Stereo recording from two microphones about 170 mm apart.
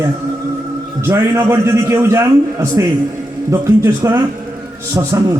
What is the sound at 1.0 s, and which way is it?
A man's voice, 15° right (ahead or behind).